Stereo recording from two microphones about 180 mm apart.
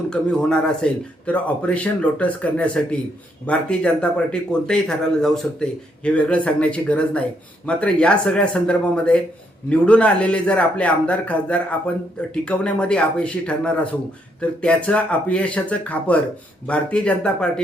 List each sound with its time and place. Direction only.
0.1 s speech: 5° left (ahead or behind)